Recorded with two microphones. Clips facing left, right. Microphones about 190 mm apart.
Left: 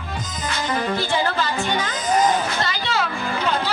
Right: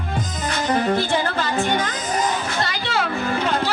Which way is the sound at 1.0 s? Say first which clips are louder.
Right 1 dB; 55° right (ahead or behind).